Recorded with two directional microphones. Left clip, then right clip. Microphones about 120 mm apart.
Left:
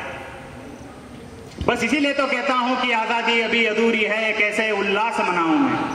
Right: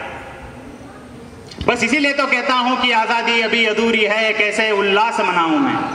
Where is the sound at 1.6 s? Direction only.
30° right (ahead or behind).